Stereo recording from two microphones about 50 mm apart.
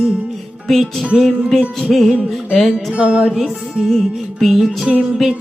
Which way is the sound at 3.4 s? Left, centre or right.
Centre.